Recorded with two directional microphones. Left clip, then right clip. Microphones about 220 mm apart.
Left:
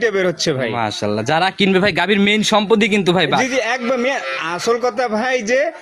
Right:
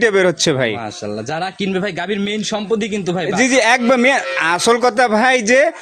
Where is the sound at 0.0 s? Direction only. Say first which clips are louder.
Right 3 dB; 30° right (ahead or behind).